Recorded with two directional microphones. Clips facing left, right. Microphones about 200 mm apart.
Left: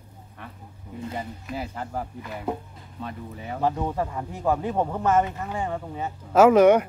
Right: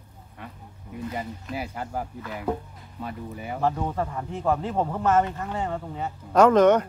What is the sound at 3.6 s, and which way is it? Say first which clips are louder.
Speech: left 1 dB; 10° left (ahead or behind).